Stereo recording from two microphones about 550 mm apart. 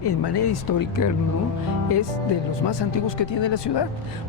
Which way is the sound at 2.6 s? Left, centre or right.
Left.